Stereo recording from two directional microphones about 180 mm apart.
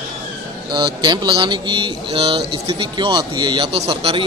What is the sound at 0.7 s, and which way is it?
A man's voice, 25° right (ahead or behind).